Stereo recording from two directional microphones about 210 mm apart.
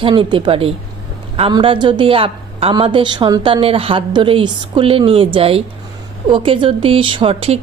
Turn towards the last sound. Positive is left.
turn(degrees=-25)  # may be behind; listen again after turning